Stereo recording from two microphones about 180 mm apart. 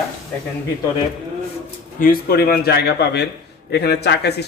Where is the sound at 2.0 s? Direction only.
55° left (ahead or behind).